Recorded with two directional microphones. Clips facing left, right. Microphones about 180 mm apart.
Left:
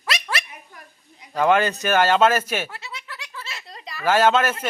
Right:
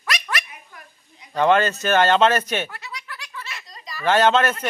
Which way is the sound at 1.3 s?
10° left (ahead or behind).